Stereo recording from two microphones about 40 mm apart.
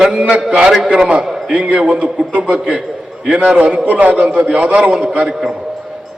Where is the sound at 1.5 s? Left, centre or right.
Right.